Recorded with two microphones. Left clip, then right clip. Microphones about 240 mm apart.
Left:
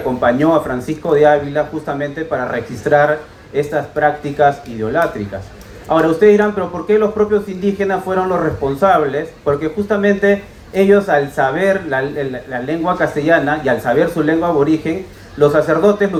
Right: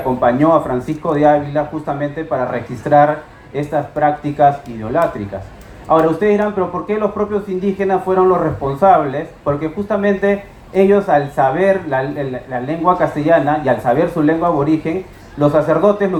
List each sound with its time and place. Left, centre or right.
0.2 s speech: right